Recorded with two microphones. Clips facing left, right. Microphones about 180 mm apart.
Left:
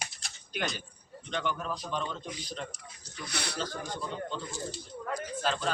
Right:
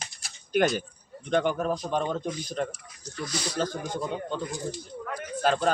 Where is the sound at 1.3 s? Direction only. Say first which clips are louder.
Right 9 dB; 50° right (ahead or behind).